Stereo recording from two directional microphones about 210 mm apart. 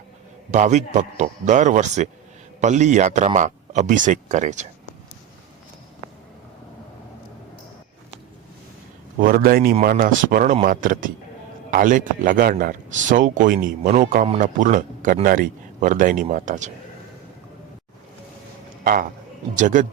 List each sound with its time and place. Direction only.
0.5 s speech: 35° right (ahead or behind)
9.2 s speech: 45° right (ahead or behind)
19.5 s speech: 35° right (ahead or behind)